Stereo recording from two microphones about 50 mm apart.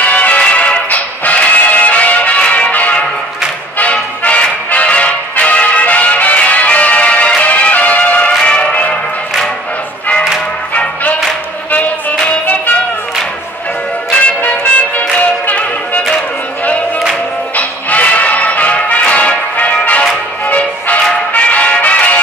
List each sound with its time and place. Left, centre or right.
0.0 s music: left
10.7 s music: left
14.2 s music: left
17.6 s music: left